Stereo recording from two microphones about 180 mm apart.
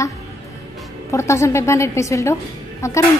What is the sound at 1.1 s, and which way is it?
A woman's voice, 15° left (ahead or behind).